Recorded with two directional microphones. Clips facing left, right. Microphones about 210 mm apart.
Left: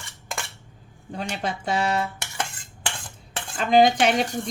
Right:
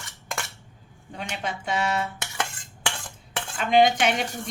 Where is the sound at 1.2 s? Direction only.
35° left (ahead or behind).